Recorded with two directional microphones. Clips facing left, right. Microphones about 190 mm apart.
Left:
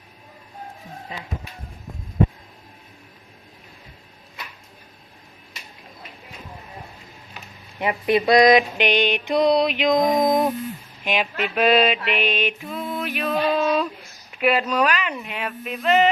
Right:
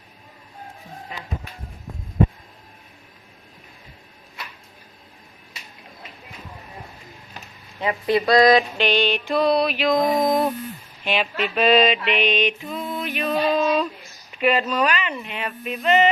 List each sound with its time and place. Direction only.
8.1 s mantra: 20° left (ahead or behind)
10.1 s a sound: 20° left (ahead or behind)
11.0 s mantra: 10° left (ahead or behind)
14.3 s speech: 5° left (ahead or behind)